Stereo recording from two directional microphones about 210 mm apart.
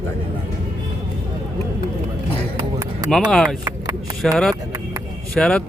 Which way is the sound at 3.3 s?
Centre (ahead or behind).